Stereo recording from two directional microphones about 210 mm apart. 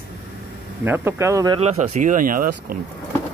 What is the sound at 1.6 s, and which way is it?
Speech, 30° right (ahead or behind).